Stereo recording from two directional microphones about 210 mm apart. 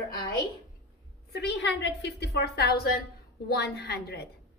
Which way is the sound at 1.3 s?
55° left (ahead or behind).